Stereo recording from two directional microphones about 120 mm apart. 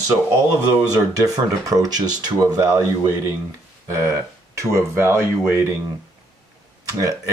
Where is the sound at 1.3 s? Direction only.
30° right (ahead or behind).